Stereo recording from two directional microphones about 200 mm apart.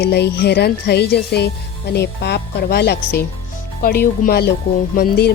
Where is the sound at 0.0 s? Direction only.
55° left (ahead or behind).